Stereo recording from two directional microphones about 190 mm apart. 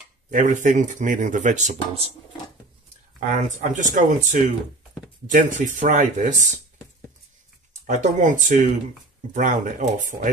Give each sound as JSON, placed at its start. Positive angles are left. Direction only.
{"t": 0.3, "sound": "speech", "side_deg": -40}
{"t": 3.2, "sound": "speech", "side_deg": -40}
{"t": 7.8, "sound": "speech", "side_deg": -40}